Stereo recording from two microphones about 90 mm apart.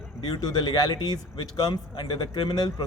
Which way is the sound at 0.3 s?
50° left (ahead or behind).